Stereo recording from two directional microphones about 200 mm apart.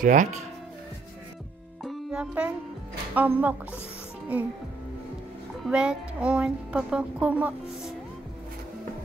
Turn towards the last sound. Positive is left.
turn(degrees=-5)  # may be behind; listen again after turning